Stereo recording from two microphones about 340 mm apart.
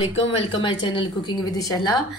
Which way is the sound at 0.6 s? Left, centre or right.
Centre.